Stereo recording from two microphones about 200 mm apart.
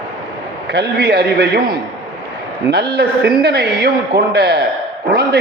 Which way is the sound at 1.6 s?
20° right (ahead or behind).